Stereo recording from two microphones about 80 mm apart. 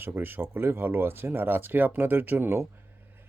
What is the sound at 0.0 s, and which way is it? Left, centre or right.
Speech, right.